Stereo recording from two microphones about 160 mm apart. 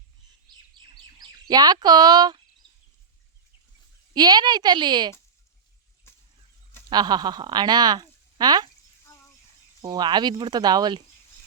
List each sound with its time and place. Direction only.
1.2 s speech: 25° right (ahead or behind)
4.1 s speech: 25° right (ahead or behind)
6.9 s speech: 25° right (ahead or behind)
9.0 s a sound: 15° left (ahead or behind)
9.8 s speech: 25° right (ahead or behind)